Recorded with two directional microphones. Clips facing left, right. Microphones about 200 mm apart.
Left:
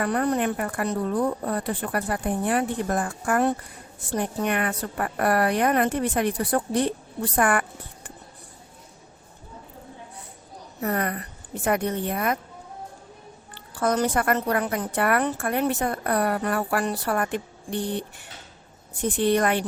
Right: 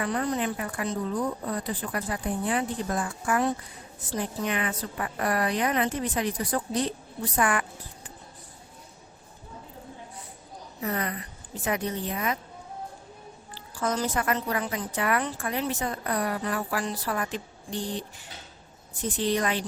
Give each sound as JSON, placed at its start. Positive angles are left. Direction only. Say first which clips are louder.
{"t": 0.0, "sound": "a woman's voice", "louder": "left 4 dB", "side_deg": 55}
{"t": 10.8, "sound": "a woman's voice", "louder": "left 4 dB", "side_deg": 55}
{"t": 13.5, "sound": "a woman's voice", "louder": "left 5 dB", "side_deg": 60}
{"t": 19.1, "sound": "a woman's voice", "louder": "left 5 dB", "side_deg": 55}